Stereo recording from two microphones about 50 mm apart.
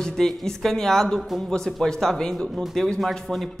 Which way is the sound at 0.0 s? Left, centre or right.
Centre.